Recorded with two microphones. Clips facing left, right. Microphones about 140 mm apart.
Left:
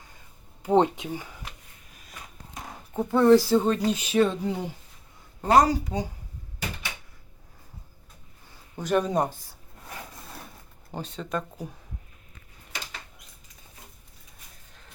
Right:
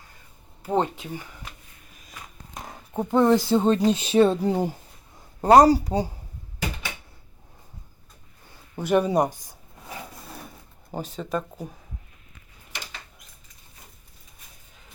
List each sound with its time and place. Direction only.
0.6 s speech: 15° left (ahead or behind)
2.9 s speech: 15° right (ahead or behind); by 6.1 s 35° right (ahead or behind)
8.7 s speech: 10° right (ahead or behind)
10.9 s speech: 5° right (ahead or behind)